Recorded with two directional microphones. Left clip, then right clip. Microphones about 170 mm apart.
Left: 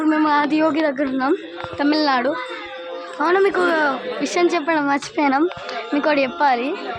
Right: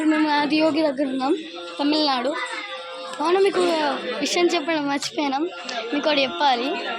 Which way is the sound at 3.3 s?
45° left (ahead or behind).